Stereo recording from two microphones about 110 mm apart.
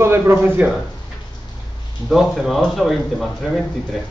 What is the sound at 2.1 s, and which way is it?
A man's voice, centre (ahead or behind).